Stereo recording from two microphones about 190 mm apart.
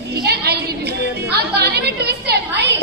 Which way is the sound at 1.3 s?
55° right (ahead or behind).